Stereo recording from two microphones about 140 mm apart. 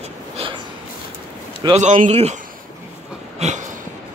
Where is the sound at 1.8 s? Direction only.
60° right (ahead or behind).